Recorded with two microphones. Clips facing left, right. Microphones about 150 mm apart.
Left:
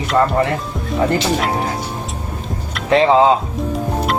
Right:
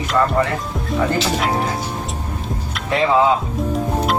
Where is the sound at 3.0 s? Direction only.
25° left (ahead or behind).